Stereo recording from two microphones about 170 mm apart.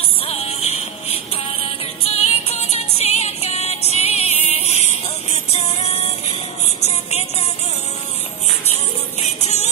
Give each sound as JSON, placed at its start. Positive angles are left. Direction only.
{"t": 0.2, "sound": "music", "side_deg": 35}
{"t": 6.8, "sound": "a sound", "side_deg": 40}
{"t": 9.4, "sound": "music", "side_deg": 40}